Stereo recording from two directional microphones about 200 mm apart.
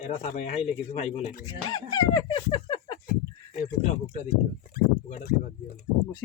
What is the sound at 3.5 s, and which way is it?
Speech, 35° left (ahead or behind).